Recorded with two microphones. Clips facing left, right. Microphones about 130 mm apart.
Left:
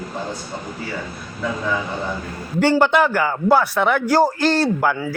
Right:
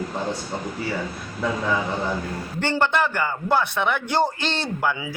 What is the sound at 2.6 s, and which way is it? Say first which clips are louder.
A man's voice: left 6 dB; 10° left (ahead or behind).